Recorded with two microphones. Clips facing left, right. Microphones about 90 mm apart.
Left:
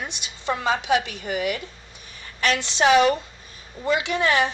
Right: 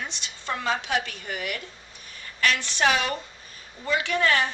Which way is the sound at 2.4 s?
20° left (ahead or behind).